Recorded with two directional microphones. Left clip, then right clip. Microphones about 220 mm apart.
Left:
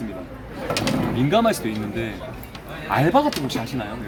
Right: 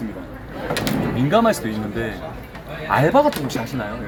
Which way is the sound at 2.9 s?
5° right (ahead or behind).